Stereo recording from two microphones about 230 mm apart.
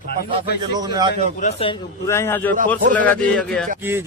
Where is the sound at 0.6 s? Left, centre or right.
Centre.